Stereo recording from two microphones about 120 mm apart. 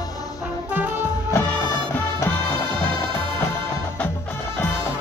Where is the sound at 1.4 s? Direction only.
20° left (ahead or behind).